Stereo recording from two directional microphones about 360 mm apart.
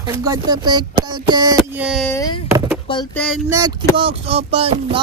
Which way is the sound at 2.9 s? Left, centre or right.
Centre.